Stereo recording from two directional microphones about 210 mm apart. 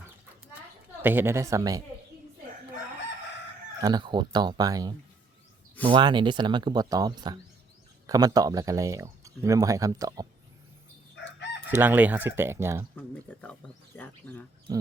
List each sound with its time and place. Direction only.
1.0 s speech: 10° right (ahead or behind)
3.8 s speech: 20° right (ahead or behind)
11.7 s speech: 10° right (ahead or behind)
13.0 s speech: 5° left (ahead or behind)
14.7 s speech: 15° right (ahead or behind)